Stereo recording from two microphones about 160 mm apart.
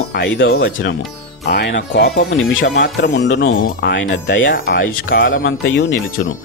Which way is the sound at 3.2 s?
70° left (ahead or behind).